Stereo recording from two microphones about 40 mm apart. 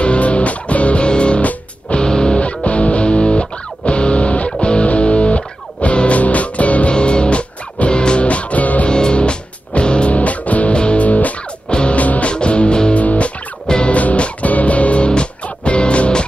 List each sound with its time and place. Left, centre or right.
0.0 s music: left
1.4 s music: left
2.0 s music: centre
2.4 s music: left
6.9 s music: left
8.8 s music: left
10.7 s music: left
11.7 s music: left
12.0 s music: left
12.3 s music: left
12.9 s music: left
13.7 s music: left
13.9 s music: left